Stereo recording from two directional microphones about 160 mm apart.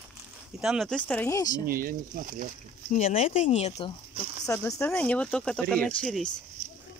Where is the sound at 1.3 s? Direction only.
25° left (ahead or behind).